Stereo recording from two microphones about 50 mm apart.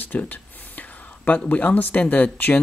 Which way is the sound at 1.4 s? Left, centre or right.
Left.